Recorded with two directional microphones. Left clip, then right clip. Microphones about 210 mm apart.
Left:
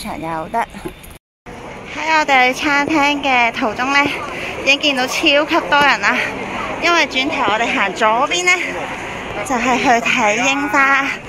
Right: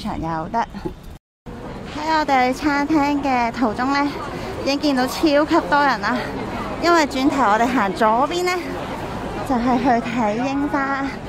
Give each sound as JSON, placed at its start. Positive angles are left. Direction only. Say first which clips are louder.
{"t": 0.3, "sound": "speech", "louder": "left 3 dB", "side_deg": 0}
{"t": 2.0, "sound": "speech", "louder": "left 5 dB", "side_deg": -15}
{"t": 6.8, "sound": "speech", "louder": "left 2 dB", "side_deg": -25}